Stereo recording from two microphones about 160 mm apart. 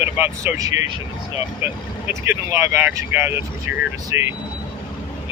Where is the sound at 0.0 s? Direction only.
15° right (ahead or behind).